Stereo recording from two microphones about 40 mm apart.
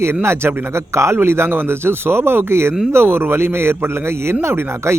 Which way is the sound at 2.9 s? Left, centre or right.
Right.